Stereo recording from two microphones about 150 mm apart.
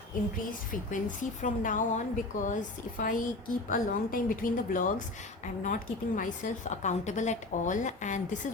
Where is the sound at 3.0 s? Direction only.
65° left (ahead or behind).